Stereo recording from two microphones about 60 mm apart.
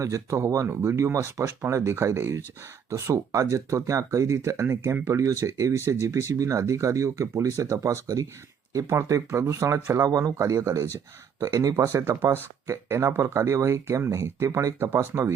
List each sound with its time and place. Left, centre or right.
0.0 s speech: right
2.9 s speech: right
4.4 s speech: right
4.7 s speech: right
6.3 s speech: right
8.0 s speech: right
9.0 s speech: right
10.3 s speech: right
11.3 s speech: right